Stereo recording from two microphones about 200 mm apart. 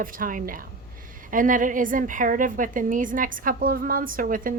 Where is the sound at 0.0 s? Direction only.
45° right (ahead or behind).